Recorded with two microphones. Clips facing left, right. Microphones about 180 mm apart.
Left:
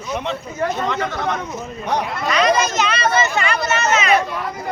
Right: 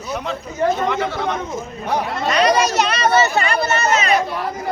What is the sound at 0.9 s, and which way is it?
Speech, 15° right (ahead or behind).